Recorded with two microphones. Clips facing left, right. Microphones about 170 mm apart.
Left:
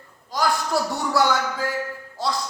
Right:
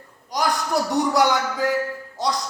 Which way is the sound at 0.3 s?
20° right (ahead or behind).